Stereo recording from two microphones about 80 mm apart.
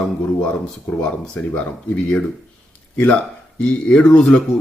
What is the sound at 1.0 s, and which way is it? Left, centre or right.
A man's voice, centre.